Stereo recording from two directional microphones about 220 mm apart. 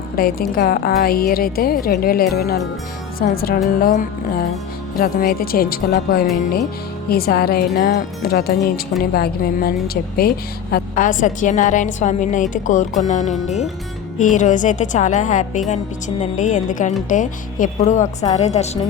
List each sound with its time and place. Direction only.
0.2 s a woman's voice: 40° left (ahead or behind)